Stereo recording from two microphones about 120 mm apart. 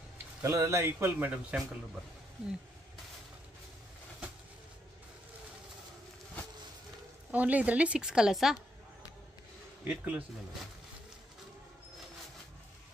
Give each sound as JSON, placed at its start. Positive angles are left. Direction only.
{"t": 0.4, "sound": "speech", "side_deg": -20}
{"t": 7.2, "sound": "a woman's voice", "side_deg": -10}
{"t": 9.8, "sound": "a woman's voice", "side_deg": -10}